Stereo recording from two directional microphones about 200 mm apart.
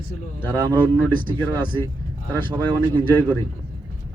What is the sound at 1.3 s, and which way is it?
Speech, 20° right (ahead or behind).